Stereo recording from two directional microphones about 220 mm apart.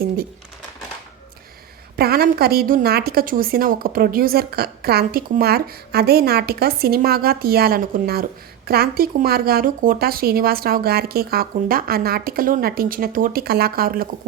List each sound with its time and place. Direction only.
2.0 s a woman's voice: 45° right (ahead or behind)